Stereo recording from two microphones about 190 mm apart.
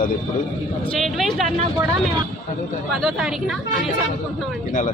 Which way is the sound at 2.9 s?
Centre (ahead or behind).